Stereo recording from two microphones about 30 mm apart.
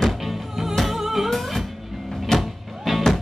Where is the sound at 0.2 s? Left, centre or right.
Centre.